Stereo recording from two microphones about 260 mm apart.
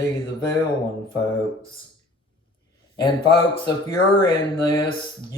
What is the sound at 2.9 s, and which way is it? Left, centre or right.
Speech, centre.